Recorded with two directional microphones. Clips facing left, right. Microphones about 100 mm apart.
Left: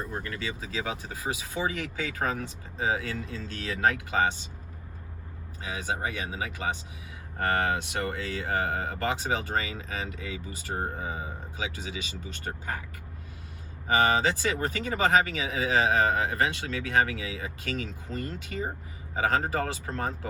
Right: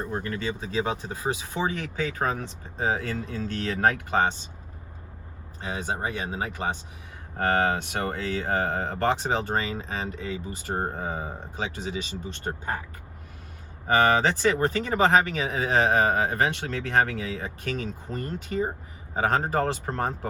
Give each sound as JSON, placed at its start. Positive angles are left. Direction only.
{"t": 0.1, "sound": "speech", "side_deg": -30}
{"t": 3.3, "sound": "speech", "side_deg": -50}
{"t": 5.6, "sound": "speech", "side_deg": -35}
{"t": 13.8, "sound": "speech", "side_deg": -50}